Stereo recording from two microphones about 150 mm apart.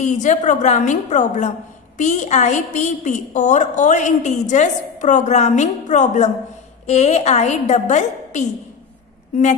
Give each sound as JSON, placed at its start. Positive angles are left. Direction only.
{"t": 0.0, "sound": "a woman's voice", "side_deg": 55}